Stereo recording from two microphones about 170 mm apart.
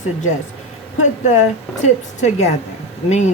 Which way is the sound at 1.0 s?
45° left (ahead or behind).